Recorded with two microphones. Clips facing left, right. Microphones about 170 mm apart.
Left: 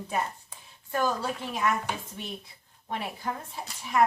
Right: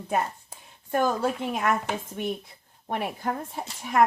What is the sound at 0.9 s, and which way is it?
Speech, 55° right (ahead or behind).